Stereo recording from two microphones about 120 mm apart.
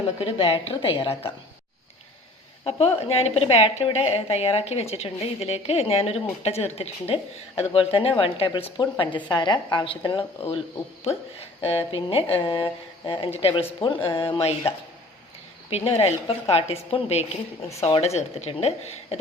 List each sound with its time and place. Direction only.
0.2 s speech: 50° left (ahead or behind)
2.6 s a woman's voice: 55° left (ahead or behind)
11.0 s speech: 55° left (ahead or behind)
15.7 s a woman's voice: 60° left (ahead or behind)
17.7 s a woman's voice: 25° left (ahead or behind)
17.9 s a woman's voice: 65° left (ahead or behind)